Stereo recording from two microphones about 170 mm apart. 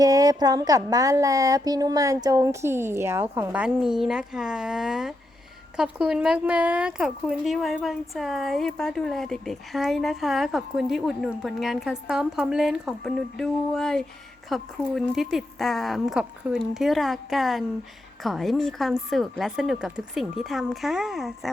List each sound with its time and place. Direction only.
0.0 s a woman's voice: 20° right (ahead or behind); by 21.5 s centre (ahead or behind)